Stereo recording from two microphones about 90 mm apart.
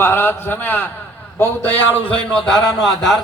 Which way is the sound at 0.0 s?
25° left (ahead or behind).